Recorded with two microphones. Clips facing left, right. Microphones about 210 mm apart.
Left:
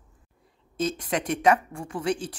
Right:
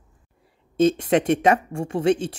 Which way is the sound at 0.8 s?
25° right (ahead or behind).